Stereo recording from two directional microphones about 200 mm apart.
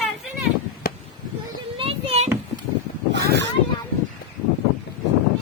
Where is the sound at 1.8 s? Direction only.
30° right (ahead or behind).